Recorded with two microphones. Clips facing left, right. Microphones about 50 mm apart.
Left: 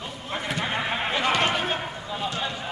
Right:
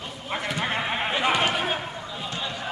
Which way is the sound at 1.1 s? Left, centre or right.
Centre.